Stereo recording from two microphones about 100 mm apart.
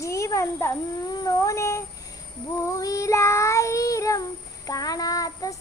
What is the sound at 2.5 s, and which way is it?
Child singing, 35° left (ahead or behind).